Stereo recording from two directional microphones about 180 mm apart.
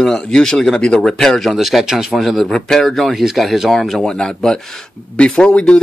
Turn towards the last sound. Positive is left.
turn(degrees=5)  # may be behind; listen again after turning